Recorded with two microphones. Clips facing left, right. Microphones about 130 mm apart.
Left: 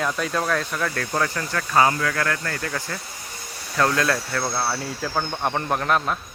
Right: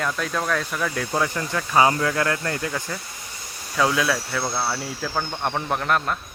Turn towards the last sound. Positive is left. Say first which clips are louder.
# left 1 dB
turn(degrees=0)  # may be behind; listen again after turning